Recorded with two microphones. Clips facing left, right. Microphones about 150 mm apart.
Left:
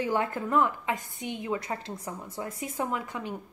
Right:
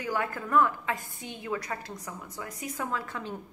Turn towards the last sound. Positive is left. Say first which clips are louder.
# left 2 dB
turn(degrees=15)  # may be behind; listen again after turning